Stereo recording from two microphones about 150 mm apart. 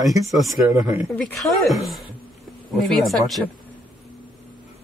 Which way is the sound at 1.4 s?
Centre (ahead or behind).